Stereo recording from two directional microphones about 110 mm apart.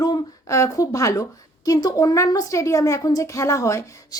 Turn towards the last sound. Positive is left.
turn(degrees=30)  # may be behind; listen again after turning